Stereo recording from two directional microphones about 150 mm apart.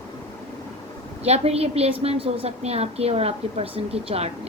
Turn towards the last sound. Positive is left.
turn(degrees=-40)  # may be behind; listen again after turning